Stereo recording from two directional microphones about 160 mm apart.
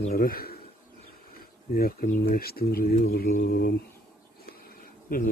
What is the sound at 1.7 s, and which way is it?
Speech, 70° left (ahead or behind).